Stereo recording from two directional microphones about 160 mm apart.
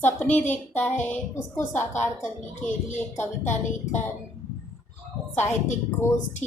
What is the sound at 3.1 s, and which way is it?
Speech, 50° left (ahead or behind).